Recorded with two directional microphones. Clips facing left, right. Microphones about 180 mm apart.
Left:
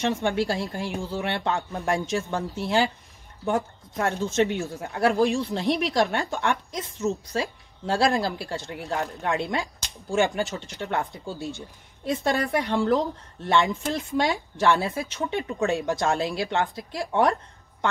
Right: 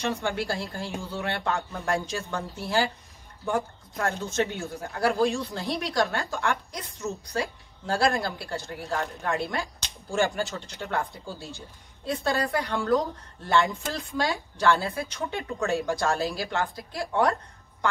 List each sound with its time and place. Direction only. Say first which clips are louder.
0.2 s a woman's voice: left 4 dB; 20° left (ahead or behind)
11.1 s speech: left 5 dB; centre (ahead or behind)
12.1 s a woman's voice: left 2 dB; 20° left (ahead or behind)